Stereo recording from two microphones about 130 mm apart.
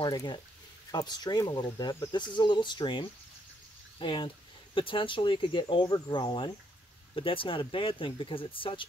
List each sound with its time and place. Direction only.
0.0 s speech: 35° left (ahead or behind)